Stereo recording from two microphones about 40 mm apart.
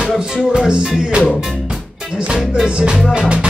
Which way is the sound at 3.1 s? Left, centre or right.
Right.